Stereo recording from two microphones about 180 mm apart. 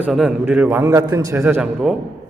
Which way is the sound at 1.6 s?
Centre (ahead or behind).